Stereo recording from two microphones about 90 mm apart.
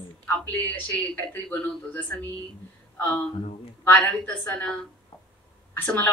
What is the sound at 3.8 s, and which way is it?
A woman's voice, 15° left (ahead or behind).